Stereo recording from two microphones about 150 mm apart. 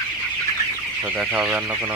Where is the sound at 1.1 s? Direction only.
10° right (ahead or behind).